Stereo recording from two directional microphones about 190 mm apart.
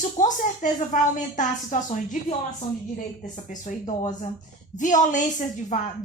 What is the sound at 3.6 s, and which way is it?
A woman's voice, 40° left (ahead or behind).